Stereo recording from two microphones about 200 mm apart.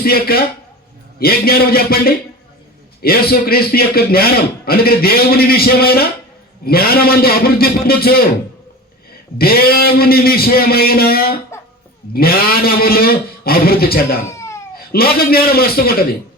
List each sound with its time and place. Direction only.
0.0 s a man's voice: 50° left (ahead or behind)
9.4 s a man's voice: 50° left (ahead or behind)
14.3 s cat: 15° left (ahead or behind)
14.8 s a man's voice: 50° left (ahead or behind)